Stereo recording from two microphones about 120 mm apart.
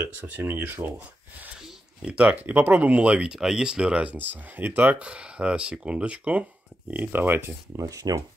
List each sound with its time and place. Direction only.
0.4 s speech: 15° right (ahead or behind)
7.8 s speech: 30° right (ahead or behind)